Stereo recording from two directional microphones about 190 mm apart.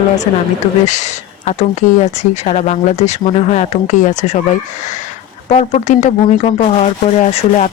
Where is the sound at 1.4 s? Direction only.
35° left (ahead or behind).